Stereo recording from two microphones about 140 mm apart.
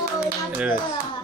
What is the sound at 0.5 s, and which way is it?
Speech, 10° right (ahead or behind).